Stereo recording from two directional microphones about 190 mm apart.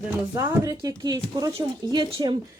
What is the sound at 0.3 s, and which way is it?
Speech, 20° right (ahead or behind).